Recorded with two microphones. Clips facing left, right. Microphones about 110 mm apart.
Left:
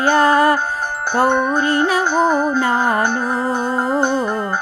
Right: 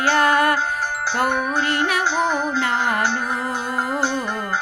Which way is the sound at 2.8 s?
30° left (ahead or behind).